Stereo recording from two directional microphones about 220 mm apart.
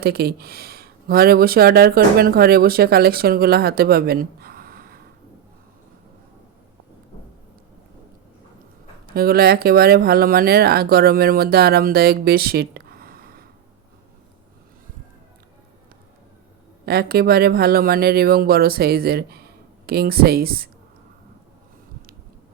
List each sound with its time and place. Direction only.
0.0 s speech: 45° right (ahead or behind)
9.0 s speech: 45° right (ahead or behind)
16.8 s speech: 45° right (ahead or behind)